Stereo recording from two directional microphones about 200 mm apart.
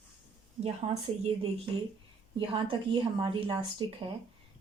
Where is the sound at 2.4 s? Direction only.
25° right (ahead or behind).